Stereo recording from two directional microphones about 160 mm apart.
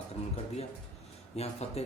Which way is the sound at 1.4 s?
40° left (ahead or behind).